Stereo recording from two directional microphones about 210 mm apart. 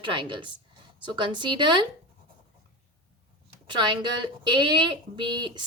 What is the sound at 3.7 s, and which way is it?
A woman's voice, 20° right (ahead or behind).